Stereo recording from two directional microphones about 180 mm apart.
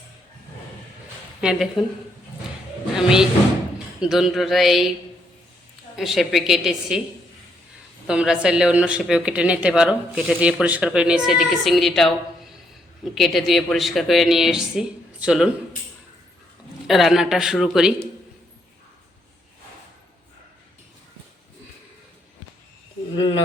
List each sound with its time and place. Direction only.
1.4 s a woman's voice: 5° right (ahead or behind)
2.9 s speech: 5° right (ahead or behind)
6.0 s speech: centre (ahead or behind)
8.0 s speech: 5° right (ahead or behind)
13.1 s speech: centre (ahead or behind)
16.8 s speech: centre (ahead or behind)
23.1 s speech: 30° left (ahead or behind)